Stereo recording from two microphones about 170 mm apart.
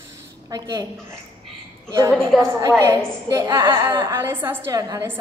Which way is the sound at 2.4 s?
20° right (ahead or behind).